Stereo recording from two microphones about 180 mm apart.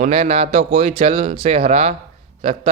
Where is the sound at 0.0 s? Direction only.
35° right (ahead or behind).